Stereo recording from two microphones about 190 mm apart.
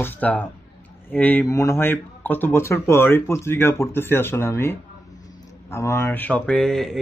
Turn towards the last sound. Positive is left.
turn(degrees=0)  # may be behind; listen again after turning